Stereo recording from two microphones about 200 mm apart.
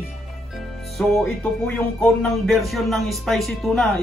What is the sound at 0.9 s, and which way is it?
Speech, centre (ahead or behind).